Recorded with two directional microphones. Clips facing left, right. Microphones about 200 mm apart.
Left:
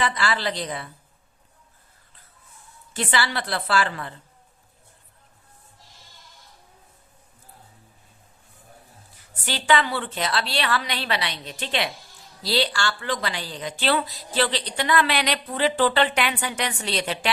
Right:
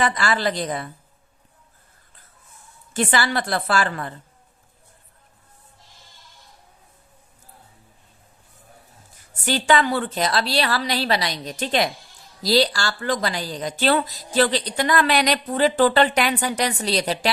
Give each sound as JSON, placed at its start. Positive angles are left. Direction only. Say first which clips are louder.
{"t": 0.0, "sound": "a woman's voice", "louder": "right 3 dB", "side_deg": -45}
{"t": 2.9, "sound": "a woman's voice", "louder": "right 4 dB", "side_deg": -45}
{"t": 9.1, "sound": "speech", "louder": "right 7 dB", "side_deg": -45}